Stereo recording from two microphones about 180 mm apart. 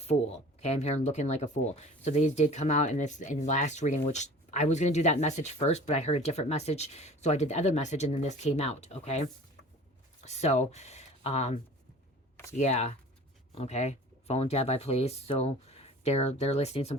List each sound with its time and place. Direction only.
0.0 s speech: 35° left (ahead or behind)
10.2 s speech: 40° left (ahead or behind)